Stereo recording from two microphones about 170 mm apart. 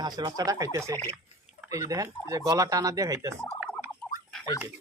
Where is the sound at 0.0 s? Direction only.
25° right (ahead or behind).